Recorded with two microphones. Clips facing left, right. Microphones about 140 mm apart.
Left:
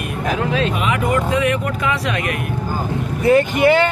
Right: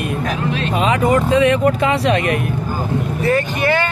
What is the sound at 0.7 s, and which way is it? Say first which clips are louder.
Speech: right 4 dB; 30° right (ahead or behind).